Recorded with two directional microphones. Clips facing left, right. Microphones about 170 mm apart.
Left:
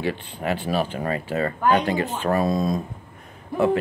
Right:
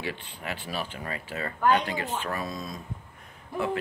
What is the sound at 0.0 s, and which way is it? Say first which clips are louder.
Speech: left 9 dB; 45° left (ahead or behind).